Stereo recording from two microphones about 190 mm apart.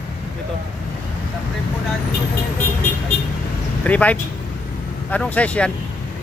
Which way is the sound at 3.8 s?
5° left (ahead or behind).